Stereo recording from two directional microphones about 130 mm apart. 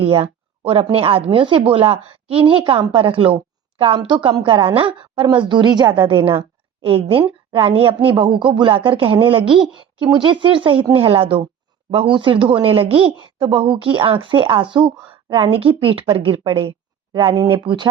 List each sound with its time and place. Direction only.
0.0 s speech: 45° right (ahead or behind)